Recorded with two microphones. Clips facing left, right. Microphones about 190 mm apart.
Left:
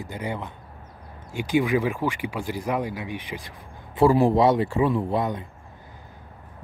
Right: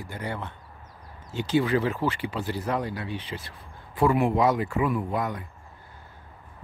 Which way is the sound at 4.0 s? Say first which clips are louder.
Left 4 dB; 30° left (ahead or behind).